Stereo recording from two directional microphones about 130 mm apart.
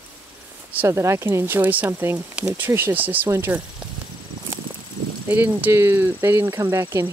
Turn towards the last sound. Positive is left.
turn(degrees=-20)  # may be behind; listen again after turning